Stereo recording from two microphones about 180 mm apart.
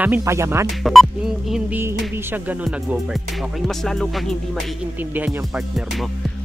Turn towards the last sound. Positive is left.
turn(degrees=-5)  # may be behind; listen again after turning